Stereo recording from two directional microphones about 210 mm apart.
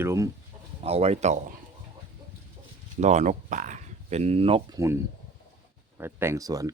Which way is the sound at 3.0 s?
35° right (ahead or behind).